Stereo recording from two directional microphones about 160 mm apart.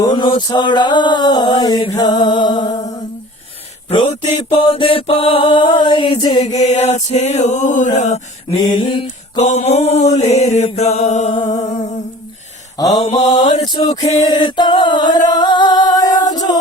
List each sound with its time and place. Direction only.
0.0 s a sound: 30° left (ahead or behind)
4.4 s mantra: 35° left (ahead or behind)
6.4 s chant: 45° left (ahead or behind)
8.7 s mantra: 30° left (ahead or behind)
9.5 s chant: 45° left (ahead or behind)
12.7 s a sound: 25° left (ahead or behind)
15.3 s singing: 25° left (ahead or behind)
16.3 s music: 25° left (ahead or behind)